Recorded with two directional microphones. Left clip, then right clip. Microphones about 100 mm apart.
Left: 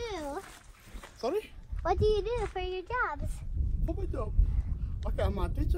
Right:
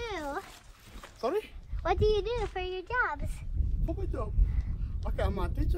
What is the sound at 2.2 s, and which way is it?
Speech, centre (ahead or behind).